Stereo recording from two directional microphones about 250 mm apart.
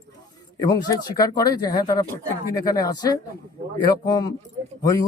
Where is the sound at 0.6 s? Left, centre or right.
Centre.